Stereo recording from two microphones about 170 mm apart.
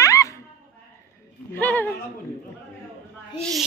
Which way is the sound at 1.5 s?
10° left (ahead or behind).